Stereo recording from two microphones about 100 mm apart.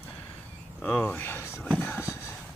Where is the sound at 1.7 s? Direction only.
20° left (ahead or behind).